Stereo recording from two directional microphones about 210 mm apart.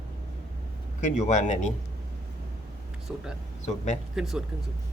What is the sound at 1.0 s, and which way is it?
Speech, 35° left (ahead or behind).